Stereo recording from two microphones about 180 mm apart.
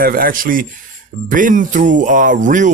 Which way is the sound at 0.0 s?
55° right (ahead or behind).